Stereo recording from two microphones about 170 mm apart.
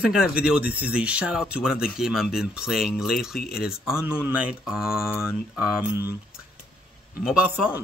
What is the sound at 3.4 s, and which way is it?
Speech, 65° left (ahead or behind).